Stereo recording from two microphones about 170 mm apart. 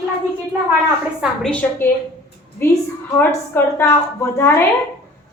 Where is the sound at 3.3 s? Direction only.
15° left (ahead or behind).